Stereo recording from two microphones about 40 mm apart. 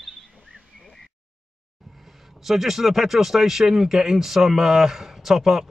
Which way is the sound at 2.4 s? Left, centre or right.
Centre.